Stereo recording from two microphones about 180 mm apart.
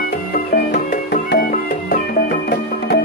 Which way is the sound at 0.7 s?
60° left (ahead or behind).